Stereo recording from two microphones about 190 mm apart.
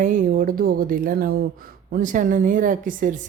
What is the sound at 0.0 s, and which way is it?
Speech, 45° right (ahead or behind).